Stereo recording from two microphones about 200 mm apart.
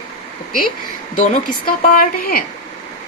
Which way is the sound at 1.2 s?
40° left (ahead or behind).